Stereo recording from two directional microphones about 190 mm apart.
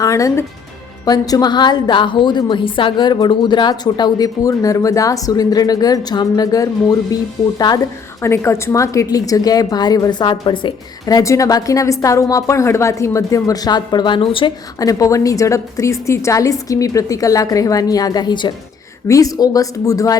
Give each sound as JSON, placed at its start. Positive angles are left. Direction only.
{"t": 0.0, "sound": "a woman's voice", "side_deg": 15}
{"t": 8.2, "sound": "a woman's voice", "side_deg": 15}